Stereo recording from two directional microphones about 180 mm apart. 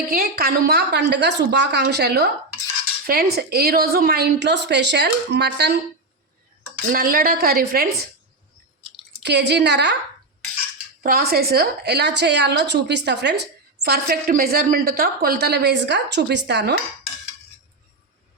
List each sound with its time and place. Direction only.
0.1 s a woman's voice: 55° right (ahead or behind)
6.9 s a woman's voice: 55° right (ahead or behind)
9.2 s a woman's voice: 70° right (ahead or behind)
11.0 s a woman's voice: 55° right (ahead or behind)